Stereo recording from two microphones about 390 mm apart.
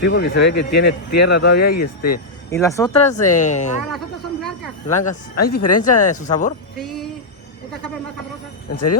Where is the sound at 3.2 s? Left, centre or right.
Left.